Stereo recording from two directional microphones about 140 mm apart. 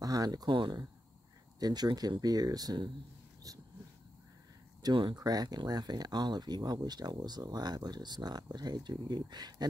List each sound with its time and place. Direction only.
0.0 s speech: 25° right (ahead or behind)
3.5 s dog: 25° right (ahead or behind)
4.8 s speech: 30° right (ahead or behind)